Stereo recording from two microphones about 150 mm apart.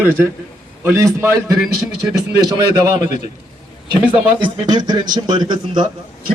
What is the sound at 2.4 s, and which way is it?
Speech, 25° right (ahead or behind).